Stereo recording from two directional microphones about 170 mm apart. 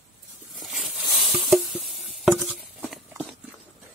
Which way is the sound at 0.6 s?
Centre (ahead or behind).